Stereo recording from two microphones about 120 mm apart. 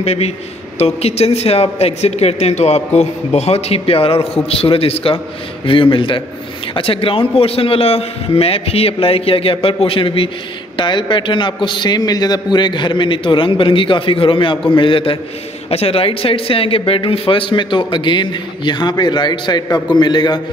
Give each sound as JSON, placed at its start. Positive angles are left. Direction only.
{"t": 0.0, "sound": "speech", "side_deg": 60}